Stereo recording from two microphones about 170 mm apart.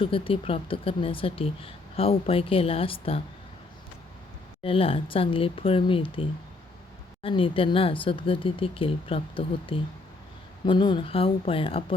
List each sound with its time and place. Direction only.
0.0 s speech: 30° left (ahead or behind)
4.6 s speech: 30° left (ahead or behind)